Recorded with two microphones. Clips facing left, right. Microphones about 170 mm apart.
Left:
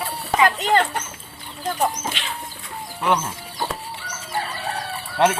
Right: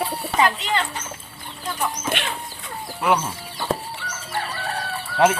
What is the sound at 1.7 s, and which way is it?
Chicken, 50° left (ahead or behind).